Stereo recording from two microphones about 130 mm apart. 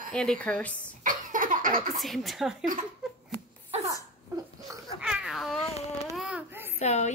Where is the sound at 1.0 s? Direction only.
90° right.